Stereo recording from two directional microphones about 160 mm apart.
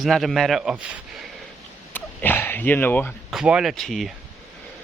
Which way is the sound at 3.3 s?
5° right (ahead or behind).